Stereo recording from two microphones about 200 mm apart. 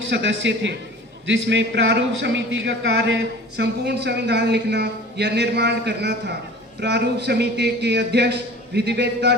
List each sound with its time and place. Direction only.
0.1 s a man's voice: 65° right (ahead or behind)